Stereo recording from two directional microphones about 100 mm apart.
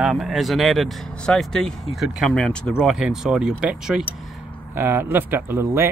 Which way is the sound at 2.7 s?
5° right (ahead or behind).